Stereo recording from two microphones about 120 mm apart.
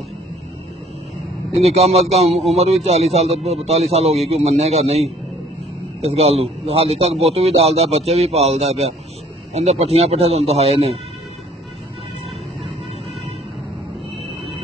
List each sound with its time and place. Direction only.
1.6 s a man's voice: 60° right (ahead or behind)